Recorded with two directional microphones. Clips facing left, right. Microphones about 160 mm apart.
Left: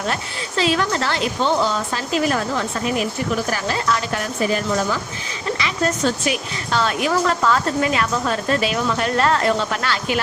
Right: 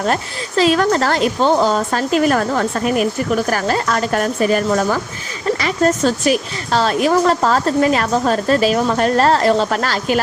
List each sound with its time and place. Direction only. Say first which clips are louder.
0.1 s a woman's voice: right 6 dB; 45° right (ahead or behind)